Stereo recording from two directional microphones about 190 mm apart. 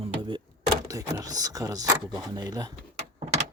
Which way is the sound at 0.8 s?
20° right (ahead or behind).